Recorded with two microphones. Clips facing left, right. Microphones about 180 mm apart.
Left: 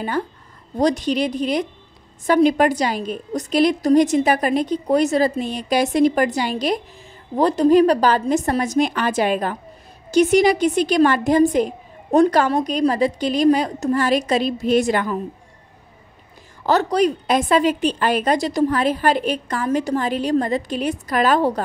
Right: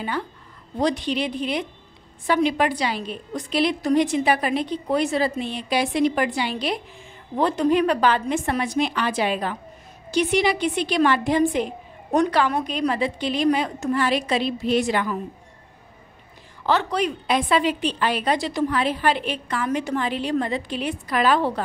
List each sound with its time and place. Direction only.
0.7 s a woman's voice: 40° left (ahead or behind)
16.6 s speech: 40° left (ahead or behind)